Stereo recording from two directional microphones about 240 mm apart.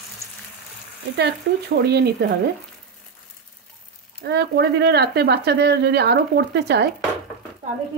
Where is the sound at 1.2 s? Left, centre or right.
Right.